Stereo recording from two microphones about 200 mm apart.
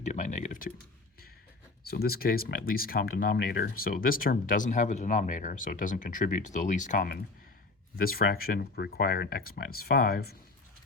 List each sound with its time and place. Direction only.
0.0 s speech: 35° left (ahead or behind)
1.9 s speech: 50° left (ahead or behind)